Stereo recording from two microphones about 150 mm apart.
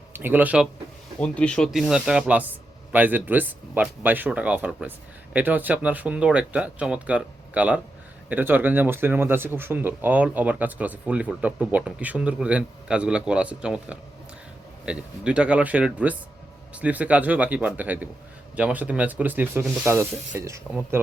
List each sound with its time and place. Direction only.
0.1 s speech: 15° right (ahead or behind)
1.2 s speech: 5° left (ahead or behind); by 21.0 s 15° right (ahead or behind)